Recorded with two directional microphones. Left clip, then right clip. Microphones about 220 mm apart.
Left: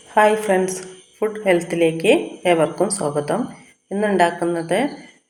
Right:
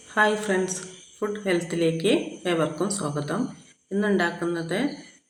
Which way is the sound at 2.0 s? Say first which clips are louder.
Left 8 dB; 5° left (ahead or behind).